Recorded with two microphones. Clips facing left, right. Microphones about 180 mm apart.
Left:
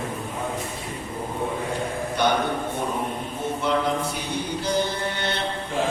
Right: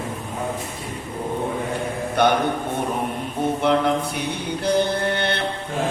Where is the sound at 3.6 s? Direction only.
60° right (ahead or behind).